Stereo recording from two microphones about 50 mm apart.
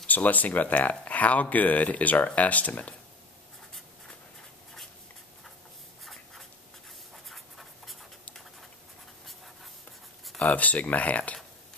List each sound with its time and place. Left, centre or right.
0.0 s speech: left
7.2 s writing: centre
10.5 s speech: left